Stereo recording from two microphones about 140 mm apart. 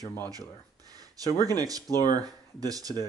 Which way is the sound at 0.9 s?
25° right (ahead or behind).